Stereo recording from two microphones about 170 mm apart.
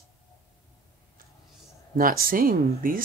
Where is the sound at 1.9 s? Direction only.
60° right (ahead or behind).